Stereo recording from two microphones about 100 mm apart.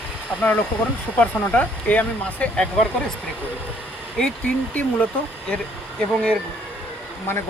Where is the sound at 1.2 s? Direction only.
15° left (ahead or behind).